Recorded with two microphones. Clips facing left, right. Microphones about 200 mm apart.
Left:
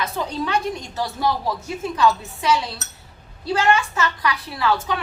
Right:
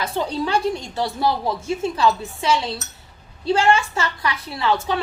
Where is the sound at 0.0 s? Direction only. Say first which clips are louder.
Right 2 dB; 30° right (ahead or behind).